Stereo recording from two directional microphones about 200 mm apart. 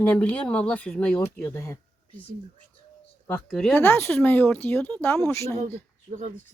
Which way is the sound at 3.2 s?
5° left (ahead or behind).